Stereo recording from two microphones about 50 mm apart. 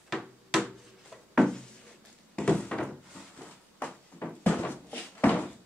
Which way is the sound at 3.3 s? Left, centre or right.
Centre.